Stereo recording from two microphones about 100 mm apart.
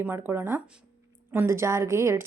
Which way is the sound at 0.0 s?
20° right (ahead or behind).